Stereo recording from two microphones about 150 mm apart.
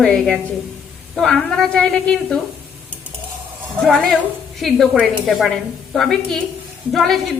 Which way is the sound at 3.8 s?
Centre (ahead or behind).